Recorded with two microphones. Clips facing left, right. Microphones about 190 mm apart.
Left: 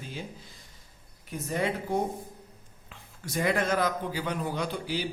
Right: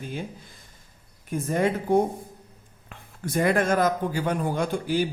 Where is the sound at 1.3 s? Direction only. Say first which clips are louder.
Right 6 dB; 50° right (ahead or behind).